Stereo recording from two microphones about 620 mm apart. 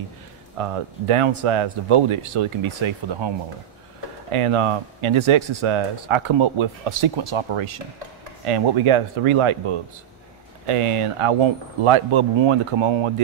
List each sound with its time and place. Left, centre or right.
0.6 s speech: right